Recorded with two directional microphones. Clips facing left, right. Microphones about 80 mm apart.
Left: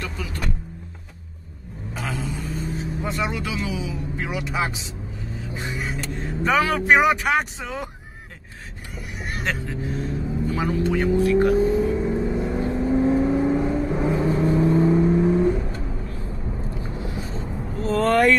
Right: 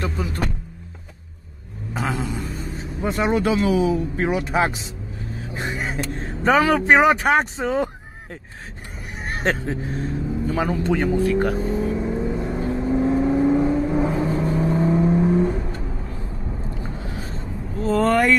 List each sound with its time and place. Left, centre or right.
0.0 s vehicle: right
2.1 s a sound: right
2.4 s vehicle: centre
3.0 s speech: right
9.2 s speech: right
11.5 s vehicle: centre
17.8 s speech: centre